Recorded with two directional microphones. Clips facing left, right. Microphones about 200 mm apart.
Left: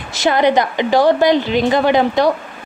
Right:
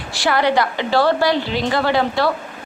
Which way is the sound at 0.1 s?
20° left (ahead or behind).